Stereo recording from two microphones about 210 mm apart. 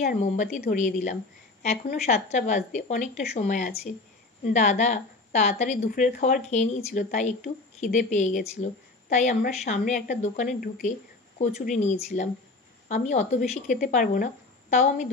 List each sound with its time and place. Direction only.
0.0 s a woman's voice: 40° left (ahead or behind)